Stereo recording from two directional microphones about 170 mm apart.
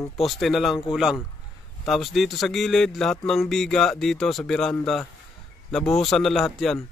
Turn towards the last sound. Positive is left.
turn(degrees=0)  # may be behind; listen again after turning